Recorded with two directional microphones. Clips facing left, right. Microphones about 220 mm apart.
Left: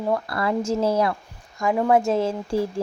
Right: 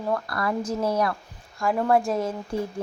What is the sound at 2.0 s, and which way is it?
Speech, 25° left (ahead or behind).